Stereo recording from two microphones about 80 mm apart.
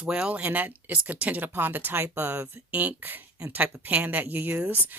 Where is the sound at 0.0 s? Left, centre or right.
Centre.